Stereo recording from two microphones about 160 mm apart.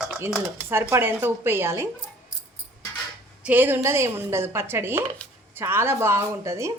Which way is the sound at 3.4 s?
10° right (ahead or behind).